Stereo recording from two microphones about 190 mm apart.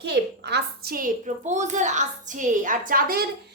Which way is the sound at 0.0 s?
60° right (ahead or behind).